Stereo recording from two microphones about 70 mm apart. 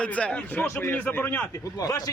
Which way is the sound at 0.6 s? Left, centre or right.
Left.